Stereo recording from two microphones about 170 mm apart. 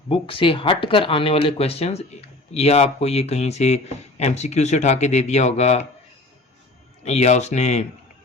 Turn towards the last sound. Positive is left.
turn(degrees=40)  # may be behind; listen again after turning